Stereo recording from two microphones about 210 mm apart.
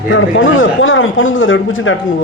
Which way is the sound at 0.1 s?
65° left (ahead or behind).